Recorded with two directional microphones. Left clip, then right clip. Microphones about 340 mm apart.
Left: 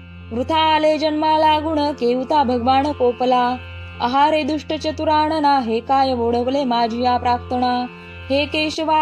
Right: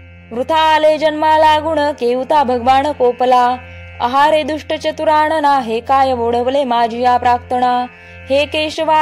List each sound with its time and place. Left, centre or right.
0.4 s a woman's voice: centre